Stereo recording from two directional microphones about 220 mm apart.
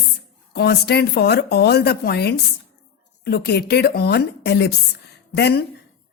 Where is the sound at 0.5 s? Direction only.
45° left (ahead or behind).